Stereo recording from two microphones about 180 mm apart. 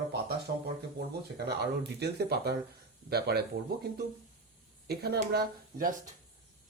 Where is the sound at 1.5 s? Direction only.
65° right (ahead or behind).